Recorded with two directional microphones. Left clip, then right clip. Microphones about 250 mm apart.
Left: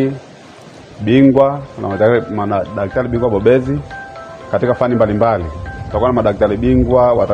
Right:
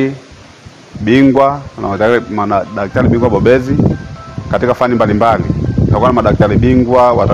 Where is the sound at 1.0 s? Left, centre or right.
Right.